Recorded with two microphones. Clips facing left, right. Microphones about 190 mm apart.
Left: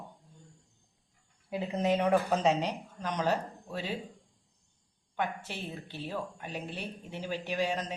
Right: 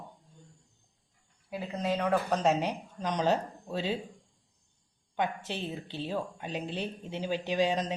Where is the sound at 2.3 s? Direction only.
5° left (ahead or behind).